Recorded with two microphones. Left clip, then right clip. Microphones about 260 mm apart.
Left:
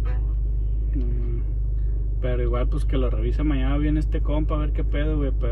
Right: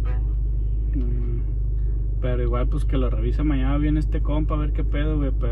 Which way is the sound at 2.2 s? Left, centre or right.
Centre.